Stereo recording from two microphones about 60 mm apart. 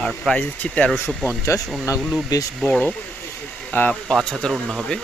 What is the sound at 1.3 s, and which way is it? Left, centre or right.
Speech, left.